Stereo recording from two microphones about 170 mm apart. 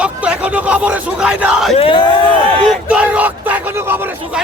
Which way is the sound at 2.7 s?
5° right (ahead or behind).